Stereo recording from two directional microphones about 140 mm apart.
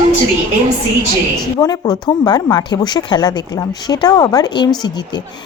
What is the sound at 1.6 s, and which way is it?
Speech, 30° left (ahead or behind).